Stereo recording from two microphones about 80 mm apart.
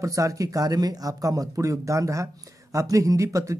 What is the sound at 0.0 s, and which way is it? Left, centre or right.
Speech, right.